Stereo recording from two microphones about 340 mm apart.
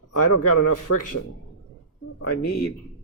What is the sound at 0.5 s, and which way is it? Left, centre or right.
Speech, left.